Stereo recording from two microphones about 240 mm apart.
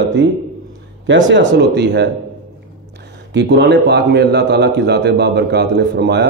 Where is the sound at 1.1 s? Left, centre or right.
Right.